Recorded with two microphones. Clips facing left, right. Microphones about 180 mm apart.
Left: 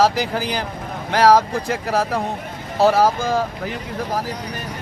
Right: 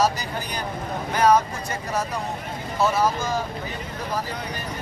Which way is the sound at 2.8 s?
65° left (ahead or behind).